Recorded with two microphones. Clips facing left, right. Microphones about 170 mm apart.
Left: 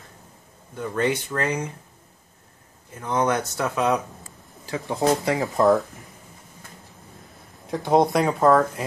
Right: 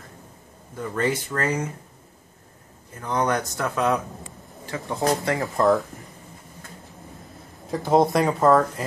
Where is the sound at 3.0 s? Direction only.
5° left (ahead or behind).